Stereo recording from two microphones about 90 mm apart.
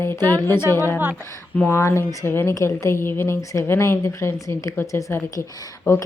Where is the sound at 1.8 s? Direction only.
35° left (ahead or behind).